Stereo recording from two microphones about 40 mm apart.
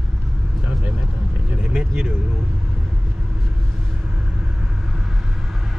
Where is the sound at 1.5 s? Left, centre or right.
Right.